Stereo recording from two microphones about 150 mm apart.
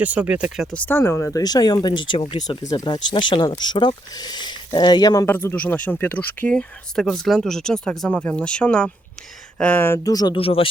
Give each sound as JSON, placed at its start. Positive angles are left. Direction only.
{"t": 0.0, "sound": "speech", "side_deg": -10}
{"t": 0.9, "sound": "speech", "side_deg": 15}
{"t": 5.2, "sound": "speech", "side_deg": 15}